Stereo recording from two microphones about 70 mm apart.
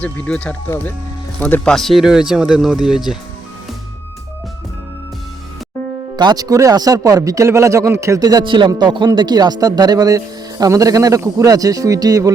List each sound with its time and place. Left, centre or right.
0.0 s speech: centre
1.6 s speech: centre
2.0 s speech: centre
6.1 s speech: right
8.2 s a man's voice: right